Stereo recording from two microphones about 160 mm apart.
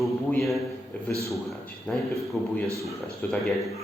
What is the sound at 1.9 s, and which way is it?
A man's voice, 5° left (ahead or behind).